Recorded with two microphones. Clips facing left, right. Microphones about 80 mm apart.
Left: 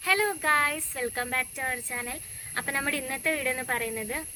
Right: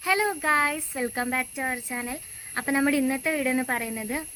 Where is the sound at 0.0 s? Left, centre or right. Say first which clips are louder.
Right 2 dB; centre.